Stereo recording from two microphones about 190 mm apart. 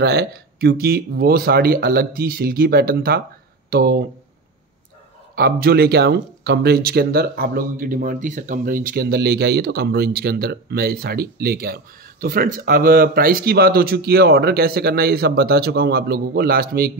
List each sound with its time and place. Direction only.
0.0 s speech: 60° right (ahead or behind)
5.3 s speech: 55° right (ahead or behind)